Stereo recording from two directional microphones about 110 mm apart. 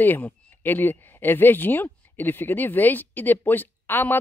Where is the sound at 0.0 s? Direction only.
15° left (ahead or behind).